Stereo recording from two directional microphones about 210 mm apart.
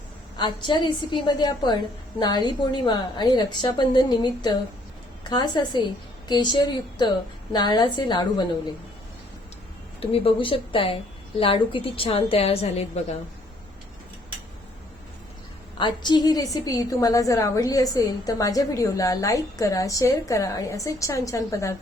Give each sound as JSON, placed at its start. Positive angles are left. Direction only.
{"t": 0.3, "sound": "a woman's voice", "side_deg": 20}
{"t": 10.0, "sound": "a woman's voice", "side_deg": 25}
{"t": 15.8, "sound": "a woman's voice", "side_deg": 20}